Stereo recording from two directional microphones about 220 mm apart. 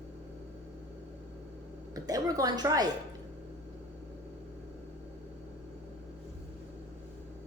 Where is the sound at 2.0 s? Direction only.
15° right (ahead or behind).